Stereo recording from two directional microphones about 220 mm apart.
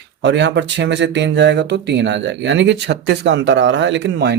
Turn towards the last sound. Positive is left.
turn(degrees=-50)  # may be behind; listen again after turning